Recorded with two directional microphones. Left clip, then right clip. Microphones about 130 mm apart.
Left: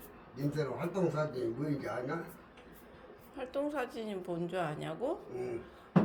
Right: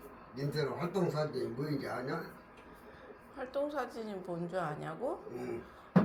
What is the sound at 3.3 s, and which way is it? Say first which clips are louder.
A woman's voice: even; 35° left (ahead or behind).